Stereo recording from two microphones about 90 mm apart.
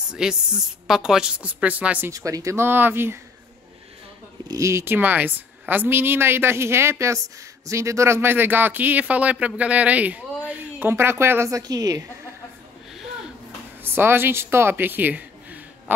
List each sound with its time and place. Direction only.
0.1 s a woman's voice: 5° right (ahead or behind)
2.0 s speech: 40° right (ahead or behind)
4.5 s speech: 35° right (ahead or behind)
4.9 s speech: 20° right (ahead or behind)
10.8 s speech: 25° right (ahead or behind); by 12.0 s 45° right (ahead or behind)
13.8 s speech: 25° right (ahead or behind)